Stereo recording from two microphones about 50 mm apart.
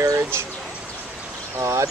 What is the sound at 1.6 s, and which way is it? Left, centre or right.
Speech, right.